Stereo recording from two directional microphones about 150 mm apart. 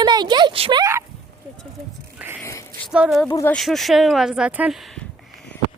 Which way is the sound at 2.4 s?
20° left (ahead or behind).